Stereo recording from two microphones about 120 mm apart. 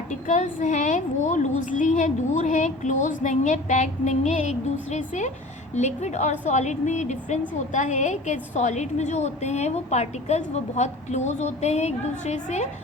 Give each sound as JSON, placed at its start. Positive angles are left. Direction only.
{"t": 0.1, "sound": "a woman's voice", "side_deg": 85}